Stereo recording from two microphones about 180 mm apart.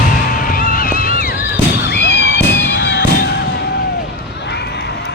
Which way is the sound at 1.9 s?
70° left (ahead or behind).